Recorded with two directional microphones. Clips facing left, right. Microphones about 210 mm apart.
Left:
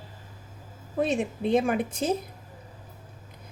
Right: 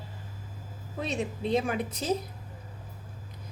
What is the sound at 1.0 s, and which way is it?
A woman's voice, 50° left (ahead or behind).